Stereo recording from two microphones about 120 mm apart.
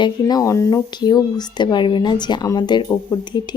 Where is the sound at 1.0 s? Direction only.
35° left (ahead or behind).